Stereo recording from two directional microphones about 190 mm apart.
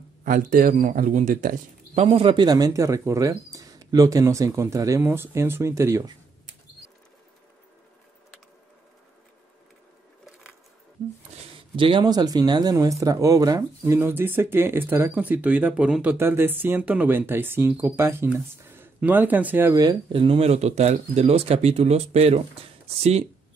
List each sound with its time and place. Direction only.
0.2 s speech: 45° right (ahead or behind)
2.0 s speech: 30° right (ahead or behind)
11.7 s speech: 25° right (ahead or behind)